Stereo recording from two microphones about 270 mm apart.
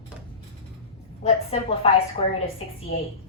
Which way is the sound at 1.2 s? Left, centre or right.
Left.